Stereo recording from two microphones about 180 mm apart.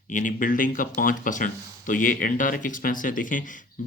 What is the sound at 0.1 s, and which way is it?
Speech, 45° left (ahead or behind).